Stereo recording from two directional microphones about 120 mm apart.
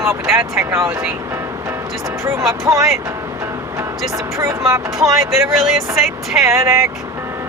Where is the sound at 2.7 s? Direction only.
30° right (ahead or behind).